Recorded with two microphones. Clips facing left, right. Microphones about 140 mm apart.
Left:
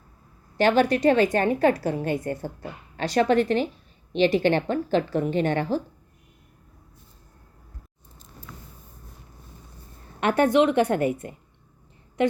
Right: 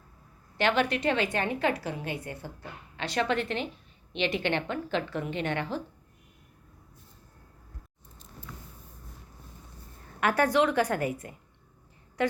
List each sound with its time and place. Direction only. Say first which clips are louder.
0.5 s a woman's voice: left 7 dB; 40° left (ahead or behind)
10.2 s a woman's voice: left 5 dB; 25° left (ahead or behind)